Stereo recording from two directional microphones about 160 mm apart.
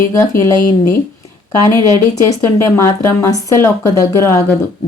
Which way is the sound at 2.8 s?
15° left (ahead or behind).